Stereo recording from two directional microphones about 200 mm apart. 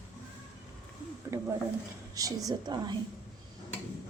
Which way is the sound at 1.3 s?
15° right (ahead or behind).